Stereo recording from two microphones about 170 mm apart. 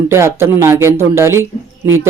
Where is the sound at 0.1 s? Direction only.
15° right (ahead or behind).